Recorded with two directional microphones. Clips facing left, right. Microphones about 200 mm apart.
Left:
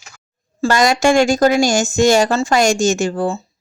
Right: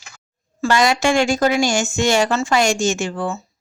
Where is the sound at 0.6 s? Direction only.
45° left (ahead or behind).